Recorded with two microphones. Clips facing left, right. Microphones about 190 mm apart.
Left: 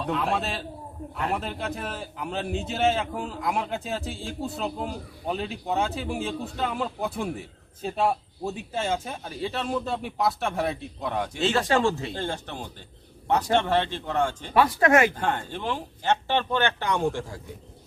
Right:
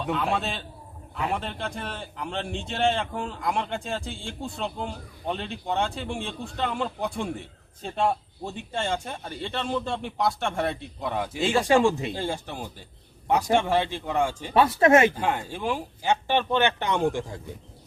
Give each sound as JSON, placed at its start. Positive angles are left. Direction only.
{"t": 0.0, "sound": "a man's voice", "side_deg": 0}
{"t": 11.3, "sound": "a man's voice", "side_deg": -10}
{"t": 14.5, "sound": "speech", "side_deg": -25}
{"t": 15.1, "sound": "a man's voice", "side_deg": -10}